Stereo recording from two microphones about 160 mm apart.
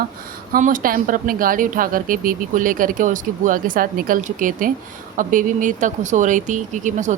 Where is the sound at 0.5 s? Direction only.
60° right (ahead or behind).